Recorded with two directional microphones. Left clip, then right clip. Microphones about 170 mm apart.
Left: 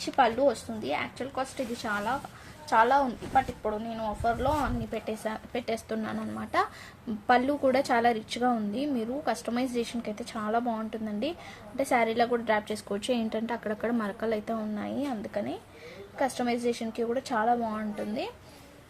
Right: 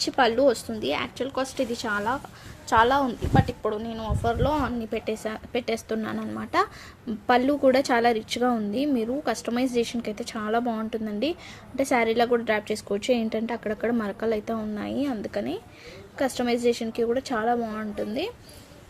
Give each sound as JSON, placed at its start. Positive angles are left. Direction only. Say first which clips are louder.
{"t": 0.0, "sound": "a woman's voice", "louder": "right 3 dB", "side_deg": -45}